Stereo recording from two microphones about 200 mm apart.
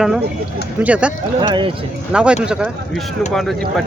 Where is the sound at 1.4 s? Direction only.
25° right (ahead or behind).